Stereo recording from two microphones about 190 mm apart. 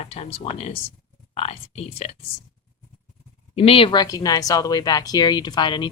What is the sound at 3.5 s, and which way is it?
Speech, 30° left (ahead or behind).